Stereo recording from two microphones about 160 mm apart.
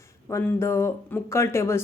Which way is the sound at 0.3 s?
15° left (ahead or behind).